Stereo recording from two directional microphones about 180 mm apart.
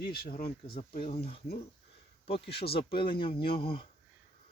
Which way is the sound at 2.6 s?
30° left (ahead or behind).